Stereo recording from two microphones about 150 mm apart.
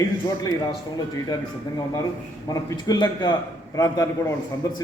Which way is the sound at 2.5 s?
25° left (ahead or behind).